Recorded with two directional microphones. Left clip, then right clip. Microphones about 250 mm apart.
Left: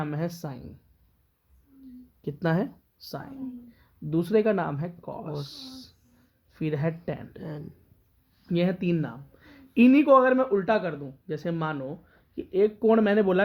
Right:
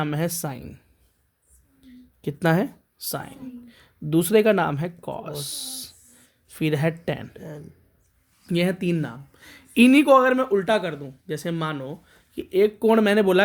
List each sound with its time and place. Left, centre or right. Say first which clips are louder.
0.0 s speech: right 6 dB; right
1.8 s a sound: right 4 dB; right
3.7 s speech: right 8 dB; right
7.3 s speech: right 1 dB; centre
8.4 s speech: right 3 dB; right